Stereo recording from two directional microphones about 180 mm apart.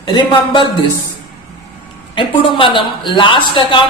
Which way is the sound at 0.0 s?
25° left (ahead or behind).